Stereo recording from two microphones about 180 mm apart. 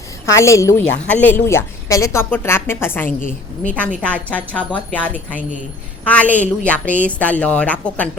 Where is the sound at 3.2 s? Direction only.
45° left (ahead or behind).